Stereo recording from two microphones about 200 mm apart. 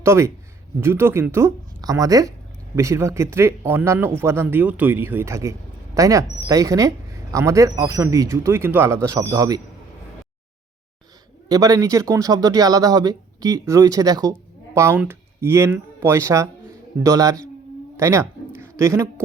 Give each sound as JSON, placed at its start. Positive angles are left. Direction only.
{"t": 0.0, "sound": "speech", "side_deg": -15}
{"t": 11.4, "sound": "speech", "side_deg": -20}
{"t": 17.9, "sound": "a sound", "side_deg": -15}